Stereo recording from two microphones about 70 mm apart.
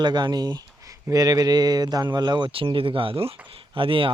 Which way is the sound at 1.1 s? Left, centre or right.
Right.